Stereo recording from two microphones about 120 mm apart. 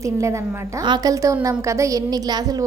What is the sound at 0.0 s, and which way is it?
A woman's voice, 25° right (ahead or behind).